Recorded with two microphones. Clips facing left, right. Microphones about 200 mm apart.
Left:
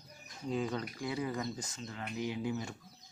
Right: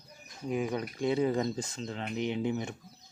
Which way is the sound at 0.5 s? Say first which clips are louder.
Right 4 dB; 15° right (ahead or behind).